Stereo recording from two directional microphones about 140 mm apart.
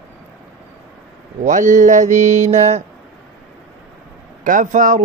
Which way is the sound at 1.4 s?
65° right (ahead or behind).